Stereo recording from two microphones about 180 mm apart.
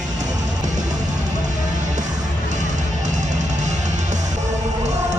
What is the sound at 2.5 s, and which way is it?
Music, 40° right (ahead or behind).